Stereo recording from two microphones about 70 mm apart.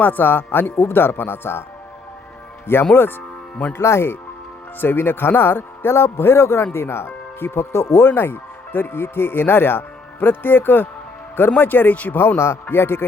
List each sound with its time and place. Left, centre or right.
0.0 s speech: left
2.9 s speech: left
3.8 s speech: left
12.4 s speech: left